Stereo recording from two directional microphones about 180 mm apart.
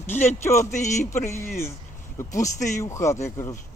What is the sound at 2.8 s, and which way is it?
Speech, 15° left (ahead or behind).